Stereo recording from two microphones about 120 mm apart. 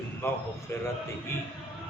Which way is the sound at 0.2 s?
20° left (ahead or behind).